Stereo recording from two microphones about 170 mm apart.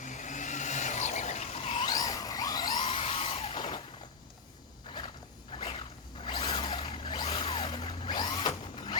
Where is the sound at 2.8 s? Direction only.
35° left (ahead or behind).